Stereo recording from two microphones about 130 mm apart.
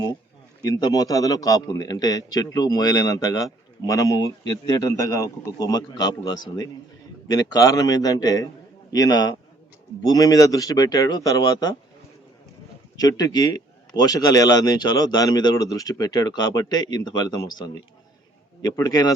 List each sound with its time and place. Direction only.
0.6 s a man's voice: 30° left (ahead or behind)
13.0 s a man's voice: 30° left (ahead or behind)